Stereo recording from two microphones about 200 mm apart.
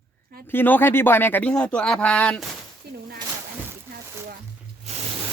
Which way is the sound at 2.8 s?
55° right (ahead or behind).